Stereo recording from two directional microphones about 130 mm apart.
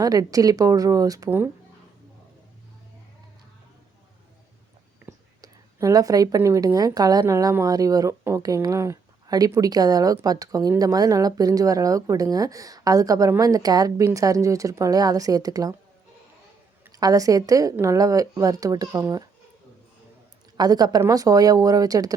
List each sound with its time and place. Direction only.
0.0 s a woman's voice: 30° right (ahead or behind)
5.0 s a woman's voice: 25° right (ahead or behind)
17.0 s a woman's voice: 25° right (ahead or behind)
20.6 s a woman's voice: 30° right (ahead or behind)